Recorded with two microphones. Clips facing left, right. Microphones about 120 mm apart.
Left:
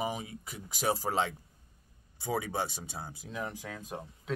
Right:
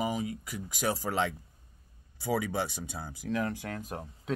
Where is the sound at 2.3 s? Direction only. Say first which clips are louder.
Right 2 dB; 25° left (ahead or behind).